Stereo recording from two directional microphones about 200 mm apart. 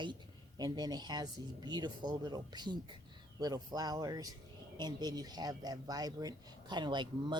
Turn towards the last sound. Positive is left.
turn(degrees=-25)  # may be behind; listen again after turning